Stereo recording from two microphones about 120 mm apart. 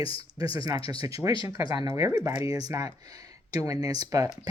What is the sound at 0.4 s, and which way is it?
Speech, 30° right (ahead or behind).